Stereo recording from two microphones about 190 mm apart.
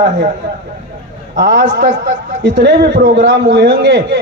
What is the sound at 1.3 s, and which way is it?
A man's voice, 65° right (ahead or behind).